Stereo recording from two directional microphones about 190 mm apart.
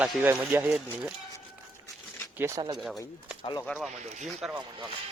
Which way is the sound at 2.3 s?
15° right (ahead or behind).